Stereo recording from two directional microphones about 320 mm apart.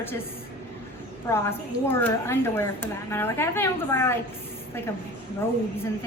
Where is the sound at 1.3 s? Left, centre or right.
Centre.